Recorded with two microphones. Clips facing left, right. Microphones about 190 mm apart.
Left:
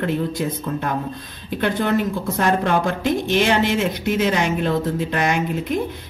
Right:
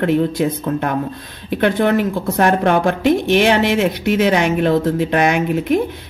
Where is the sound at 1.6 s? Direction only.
65° right (ahead or behind).